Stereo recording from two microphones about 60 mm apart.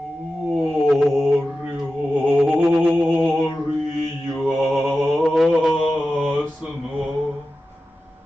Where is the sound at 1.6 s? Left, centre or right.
Centre.